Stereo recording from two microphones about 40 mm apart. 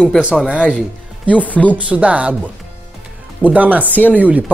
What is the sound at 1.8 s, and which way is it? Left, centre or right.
Speech, right.